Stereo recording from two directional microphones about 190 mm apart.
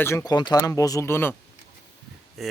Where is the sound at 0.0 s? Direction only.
15° left (ahead or behind).